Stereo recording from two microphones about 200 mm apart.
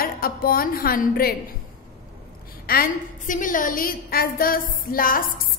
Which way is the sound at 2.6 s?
45° left (ahead or behind).